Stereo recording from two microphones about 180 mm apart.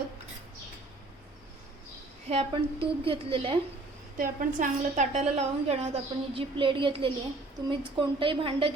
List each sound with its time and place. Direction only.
2.3 s a woman's voice: 35° right (ahead or behind)
4.2 s a woman's voice: 45° right (ahead or behind); by 8.7 s 30° right (ahead or behind)